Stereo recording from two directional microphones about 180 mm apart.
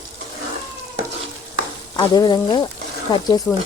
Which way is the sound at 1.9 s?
25° left (ahead or behind).